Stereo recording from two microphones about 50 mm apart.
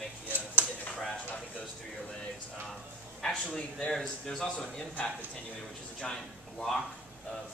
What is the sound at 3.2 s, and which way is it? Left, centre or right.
A man's voice, centre.